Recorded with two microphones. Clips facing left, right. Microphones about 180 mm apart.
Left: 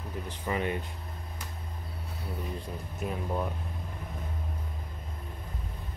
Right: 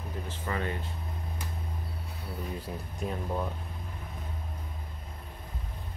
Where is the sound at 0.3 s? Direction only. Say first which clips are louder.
Left 3 dB; 15° left (ahead or behind).